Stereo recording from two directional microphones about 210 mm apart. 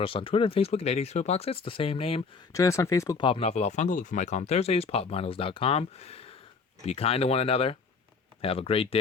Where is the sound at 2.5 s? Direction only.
15° left (ahead or behind).